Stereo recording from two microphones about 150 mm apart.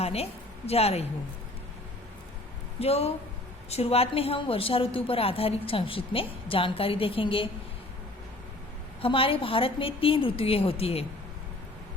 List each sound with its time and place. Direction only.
0.0 s a woman's voice: 40° left (ahead or behind)
2.8 s a woman's voice: 40° left (ahead or behind)
9.0 s a woman's voice: 40° left (ahead or behind)